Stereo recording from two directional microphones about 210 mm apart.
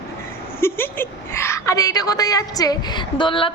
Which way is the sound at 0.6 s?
10° left (ahead or behind).